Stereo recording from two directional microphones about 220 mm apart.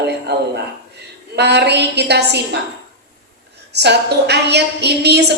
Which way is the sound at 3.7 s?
50° right (ahead or behind).